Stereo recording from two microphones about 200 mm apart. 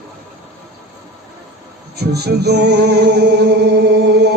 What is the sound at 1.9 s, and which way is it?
Music, 55° right (ahead or behind).